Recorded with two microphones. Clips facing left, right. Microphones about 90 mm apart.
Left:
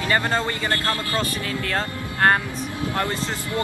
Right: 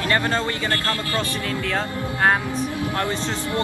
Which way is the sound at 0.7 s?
25° left (ahead or behind).